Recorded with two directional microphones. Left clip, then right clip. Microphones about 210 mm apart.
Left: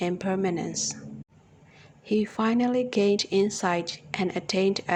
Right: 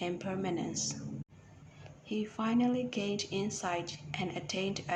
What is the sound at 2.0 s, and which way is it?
Speech, 35° left (ahead or behind).